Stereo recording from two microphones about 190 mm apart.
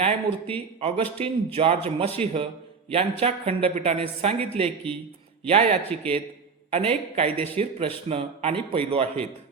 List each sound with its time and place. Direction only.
0.0 s speech: 30° right (ahead or behind)
5.9 s a man's voice: 5° left (ahead or behind)
6.7 s speech: 30° right (ahead or behind)